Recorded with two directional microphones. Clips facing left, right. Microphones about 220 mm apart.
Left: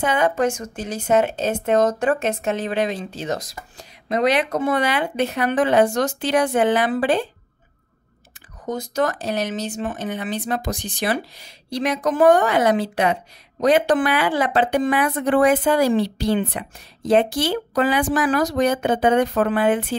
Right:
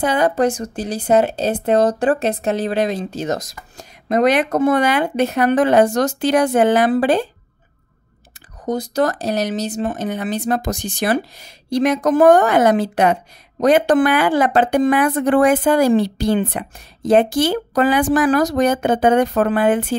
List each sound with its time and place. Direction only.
0.0 s speech: 35° right (ahead or behind)
8.6 s speech: 35° right (ahead or behind)